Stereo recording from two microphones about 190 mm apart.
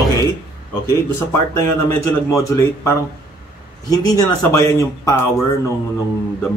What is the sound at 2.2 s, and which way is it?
Speech, 15° left (ahead or behind).